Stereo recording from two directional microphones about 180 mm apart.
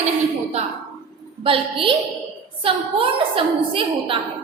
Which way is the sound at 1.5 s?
30° right (ahead or behind).